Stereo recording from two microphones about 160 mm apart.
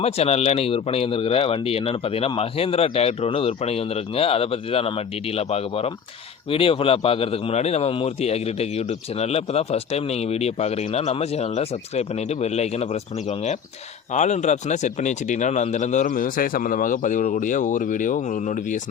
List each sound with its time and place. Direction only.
0.0 s speech: 40° left (ahead or behind)